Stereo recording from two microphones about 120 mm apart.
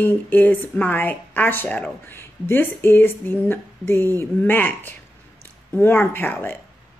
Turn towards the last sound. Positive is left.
turn(degrees=15)  # may be behind; listen again after turning